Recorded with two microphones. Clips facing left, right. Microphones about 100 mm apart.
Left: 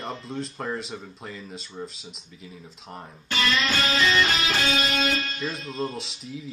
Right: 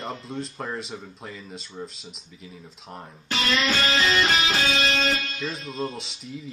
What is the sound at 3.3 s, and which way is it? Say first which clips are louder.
Music: right 1 dB; 35° right (ahead or behind).